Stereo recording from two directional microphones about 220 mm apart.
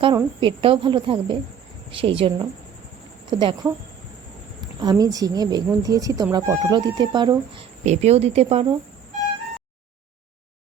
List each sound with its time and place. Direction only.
0.3 s a woman's voice: 25° right (ahead or behind)
4.8 s a woman's voice: 15° right (ahead or behind)